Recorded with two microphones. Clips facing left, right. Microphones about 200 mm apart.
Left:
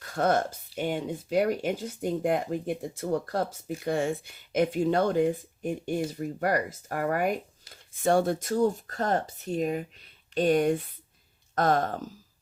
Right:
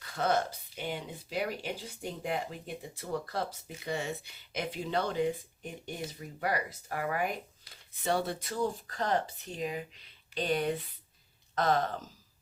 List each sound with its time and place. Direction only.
0.0 s speech: 50° left (ahead or behind)